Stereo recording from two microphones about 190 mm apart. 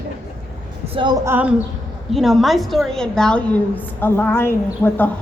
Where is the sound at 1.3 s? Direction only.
5° right (ahead or behind).